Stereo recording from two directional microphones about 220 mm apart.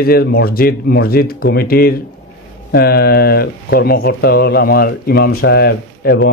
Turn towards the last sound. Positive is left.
turn(degrees=50)  # may be behind; listen again after turning